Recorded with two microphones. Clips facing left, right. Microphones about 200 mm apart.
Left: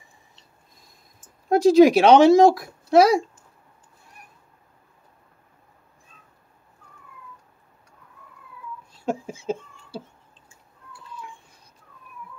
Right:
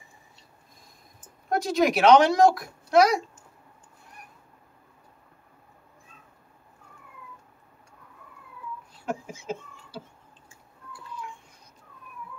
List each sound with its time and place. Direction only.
1.5 s speech: 30° left (ahead or behind)
9.0 s speech: 30° left (ahead or behind)